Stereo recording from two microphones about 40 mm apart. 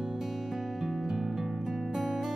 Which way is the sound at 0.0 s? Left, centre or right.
Centre.